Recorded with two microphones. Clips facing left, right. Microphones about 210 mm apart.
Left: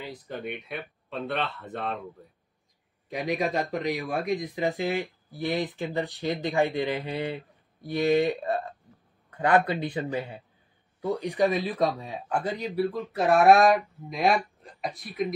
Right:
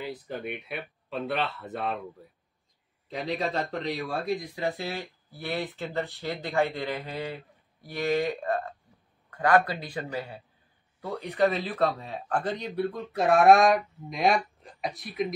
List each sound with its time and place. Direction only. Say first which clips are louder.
0.0 s a man's voice: right 1 dB; 5° right (ahead or behind)
3.1 s a man's voice: left 2 dB; 15° left (ahead or behind)